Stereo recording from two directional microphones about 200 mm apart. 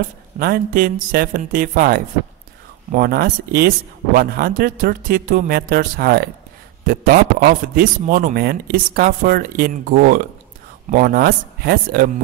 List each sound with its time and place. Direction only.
0.4 s speech: 45° right (ahead or behind)